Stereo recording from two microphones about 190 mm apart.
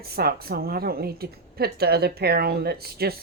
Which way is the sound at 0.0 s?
55° right (ahead or behind).